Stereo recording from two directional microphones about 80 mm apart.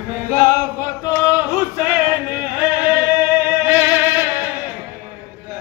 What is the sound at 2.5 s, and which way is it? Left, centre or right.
Music, right.